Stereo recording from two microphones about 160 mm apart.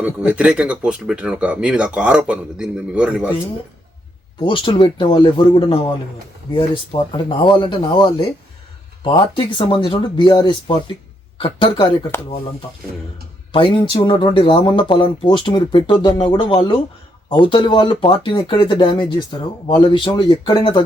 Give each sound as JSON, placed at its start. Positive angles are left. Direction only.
{"t": 0.0, "sound": "speech", "side_deg": -5}
{"t": 4.4, "sound": "speech", "side_deg": 30}
{"t": 13.5, "sound": "speech", "side_deg": 35}